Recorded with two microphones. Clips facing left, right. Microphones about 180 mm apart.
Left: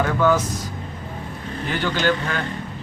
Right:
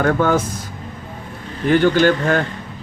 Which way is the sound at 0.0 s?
55° right (ahead or behind).